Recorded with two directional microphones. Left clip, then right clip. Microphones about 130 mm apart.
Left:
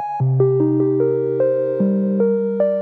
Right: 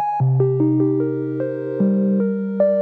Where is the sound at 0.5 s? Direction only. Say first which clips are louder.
Left 1 dB; centre (ahead or behind).